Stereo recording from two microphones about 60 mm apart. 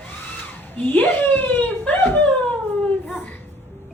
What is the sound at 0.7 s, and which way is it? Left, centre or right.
Speech, left.